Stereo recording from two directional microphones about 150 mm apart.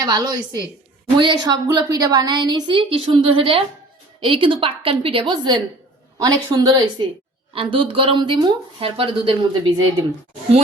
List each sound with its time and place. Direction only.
0.0 s a woman's voice: 30° right (ahead or behind)